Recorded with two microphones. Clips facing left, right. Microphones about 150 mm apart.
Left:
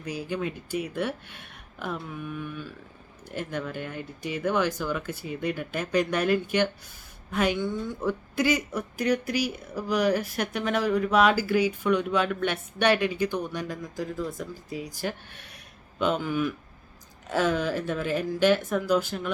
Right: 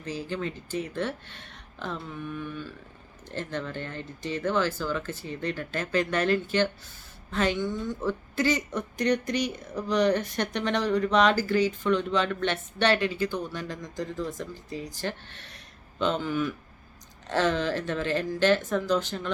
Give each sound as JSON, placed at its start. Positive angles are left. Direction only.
{"t": 0.0, "sound": "a woman's voice", "side_deg": 10}